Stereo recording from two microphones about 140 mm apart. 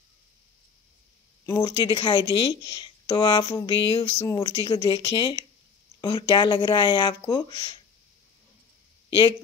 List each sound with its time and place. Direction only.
1.4 s speech: 25° left (ahead or behind)